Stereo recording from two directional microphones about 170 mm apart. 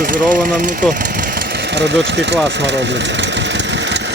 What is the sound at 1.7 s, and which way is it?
Speech, 90° right.